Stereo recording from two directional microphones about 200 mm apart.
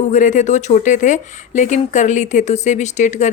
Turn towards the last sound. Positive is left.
turn(degrees=35)  # may be behind; listen again after turning